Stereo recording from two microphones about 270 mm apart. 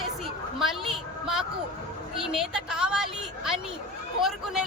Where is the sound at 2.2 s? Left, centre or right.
Centre.